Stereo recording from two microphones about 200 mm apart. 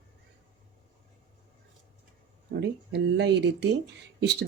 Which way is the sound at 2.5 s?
55° right (ahead or behind).